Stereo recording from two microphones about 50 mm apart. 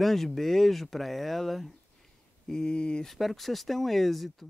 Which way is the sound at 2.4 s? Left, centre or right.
Centre.